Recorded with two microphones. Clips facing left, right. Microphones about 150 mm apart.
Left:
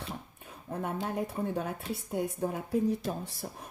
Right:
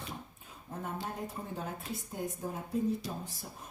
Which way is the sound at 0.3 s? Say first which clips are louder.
Left 6 dB; 65° left (ahead or behind).